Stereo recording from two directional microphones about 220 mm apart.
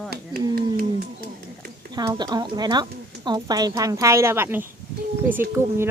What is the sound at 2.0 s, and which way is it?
A woman's voice, 20° right (ahead or behind).